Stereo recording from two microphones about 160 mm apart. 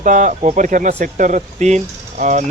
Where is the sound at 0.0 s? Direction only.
55° right (ahead or behind).